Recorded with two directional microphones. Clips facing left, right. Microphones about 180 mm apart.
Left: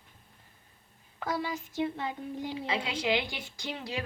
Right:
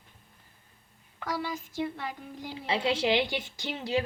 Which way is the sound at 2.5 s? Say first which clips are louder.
Right 7 dB; 30° right (ahead or behind).